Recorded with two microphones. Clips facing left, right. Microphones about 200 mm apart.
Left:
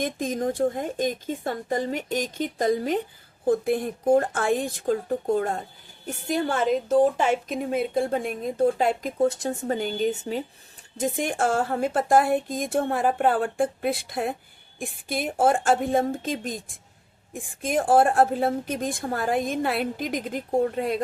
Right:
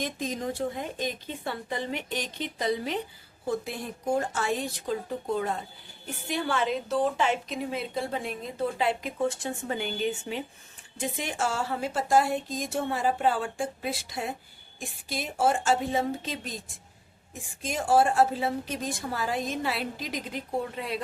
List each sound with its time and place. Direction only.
0.0 s a woman's voice: 50° left (ahead or behind)